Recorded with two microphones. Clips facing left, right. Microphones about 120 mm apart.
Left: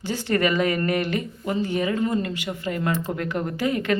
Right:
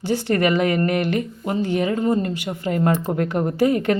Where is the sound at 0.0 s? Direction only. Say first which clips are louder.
Right 3 dB; 60° right (ahead or behind).